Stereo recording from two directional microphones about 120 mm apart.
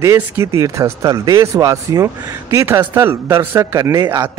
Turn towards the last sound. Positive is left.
turn(degrees=-20)  # may be behind; listen again after turning